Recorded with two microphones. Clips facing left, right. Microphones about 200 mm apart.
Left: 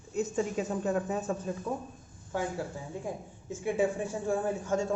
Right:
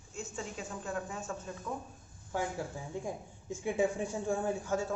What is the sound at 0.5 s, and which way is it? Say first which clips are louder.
Speech: left 9 dB; 20° left (ahead or behind).